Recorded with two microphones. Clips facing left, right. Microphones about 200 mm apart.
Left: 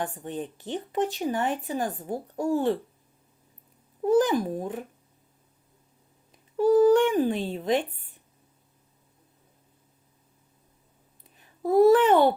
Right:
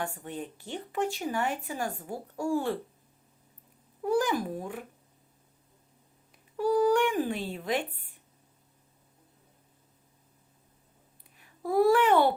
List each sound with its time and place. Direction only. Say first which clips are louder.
0.0 s speech: left 4 dB; 20° left (ahead or behind)
4.0 s speech: left 6 dB; 20° left (ahead or behind)
6.6 s speech: left 6 dB; 25° left (ahead or behind)
11.6 s speech: left 5 dB; 20° left (ahead or behind)